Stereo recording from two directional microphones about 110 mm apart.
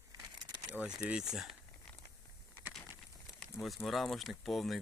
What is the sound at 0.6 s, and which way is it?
Speech, 10° right (ahead or behind).